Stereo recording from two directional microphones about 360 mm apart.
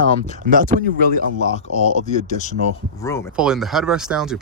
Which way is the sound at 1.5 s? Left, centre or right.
Centre.